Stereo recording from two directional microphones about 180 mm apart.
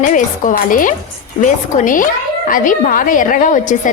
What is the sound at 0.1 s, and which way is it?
A woman's voice, 50° left (ahead or behind).